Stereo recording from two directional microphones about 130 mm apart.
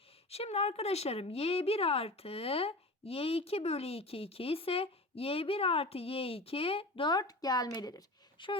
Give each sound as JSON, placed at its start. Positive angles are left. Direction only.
{"t": 0.3, "sound": "speech", "side_deg": 50}